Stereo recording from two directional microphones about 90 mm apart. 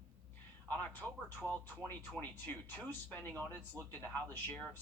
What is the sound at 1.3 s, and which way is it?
Speech, 15° left (ahead or behind).